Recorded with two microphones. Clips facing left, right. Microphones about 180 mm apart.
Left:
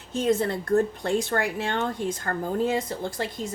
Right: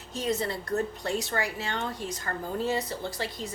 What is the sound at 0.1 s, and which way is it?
Speech, 55° left (ahead or behind).